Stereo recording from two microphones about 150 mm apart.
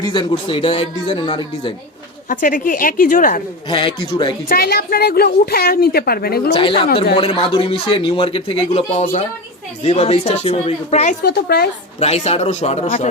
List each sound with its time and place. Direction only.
0.0 s speech: 30° left (ahead or behind)
2.3 s a woman's voice: 65° left (ahead or behind)
3.7 s speech: 35° left (ahead or behind)
4.4 s a woman's voice: 90° left
6.5 s a woman's voice: 35° left (ahead or behind)
11.2 s a woman's voice: 90° left
11.9 s a woman's voice: 45° left (ahead or behind)